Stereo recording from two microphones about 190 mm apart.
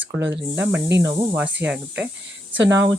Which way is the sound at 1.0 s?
25° right (ahead or behind).